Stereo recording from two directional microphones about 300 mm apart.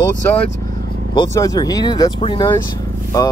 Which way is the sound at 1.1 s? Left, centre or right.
Centre.